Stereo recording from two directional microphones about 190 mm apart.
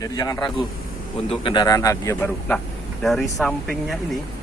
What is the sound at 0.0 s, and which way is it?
Speech, 20° left (ahead or behind).